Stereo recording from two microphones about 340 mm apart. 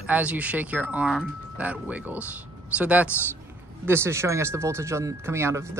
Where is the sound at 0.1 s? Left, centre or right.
Centre.